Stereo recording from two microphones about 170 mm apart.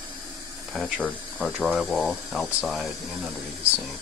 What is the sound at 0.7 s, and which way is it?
Speech, centre (ahead or behind).